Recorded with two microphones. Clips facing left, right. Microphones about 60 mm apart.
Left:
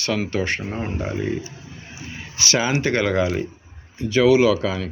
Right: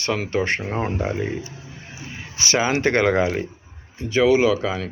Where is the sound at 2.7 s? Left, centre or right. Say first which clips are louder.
Right 2 dB; right.